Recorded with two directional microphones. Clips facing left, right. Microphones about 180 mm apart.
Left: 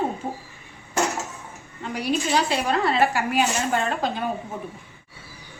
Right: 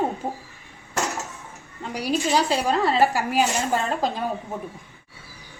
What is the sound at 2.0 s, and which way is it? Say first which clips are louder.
A woman's voice: right 1 dB; 35° right (ahead or behind).